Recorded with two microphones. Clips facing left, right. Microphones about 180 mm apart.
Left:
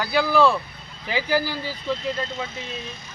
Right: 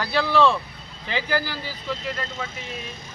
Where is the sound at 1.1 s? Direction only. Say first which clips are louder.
Left 3 dB; 10° left (ahead or behind).